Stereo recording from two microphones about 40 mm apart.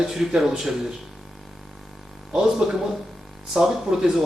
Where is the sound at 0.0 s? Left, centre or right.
Centre.